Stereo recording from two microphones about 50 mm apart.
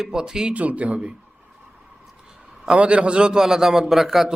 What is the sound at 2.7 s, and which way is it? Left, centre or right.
A man's voice, right.